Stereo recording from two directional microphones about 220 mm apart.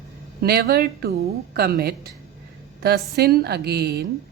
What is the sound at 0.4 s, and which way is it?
A woman's voice, 45° right (ahead or behind).